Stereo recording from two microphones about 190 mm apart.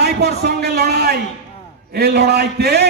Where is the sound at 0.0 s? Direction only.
60° right (ahead or behind).